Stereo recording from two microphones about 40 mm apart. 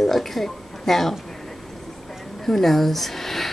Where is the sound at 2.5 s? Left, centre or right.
Centre.